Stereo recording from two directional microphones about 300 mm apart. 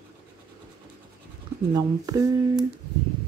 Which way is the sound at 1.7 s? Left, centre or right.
Centre.